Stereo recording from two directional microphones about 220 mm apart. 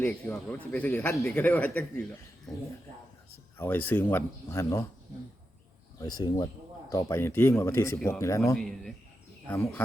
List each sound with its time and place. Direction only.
0.0 s a man's voice: 10° left (ahead or behind)
3.6 s a man's voice: 10° left (ahead or behind)
6.0 s a man's voice: 20° left (ahead or behind)